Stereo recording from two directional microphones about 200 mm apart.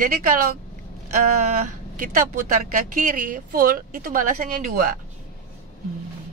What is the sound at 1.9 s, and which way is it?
Speech, 45° right (ahead or behind).